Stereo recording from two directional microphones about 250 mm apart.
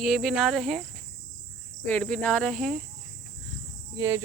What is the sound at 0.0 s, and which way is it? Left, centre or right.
Speech, centre.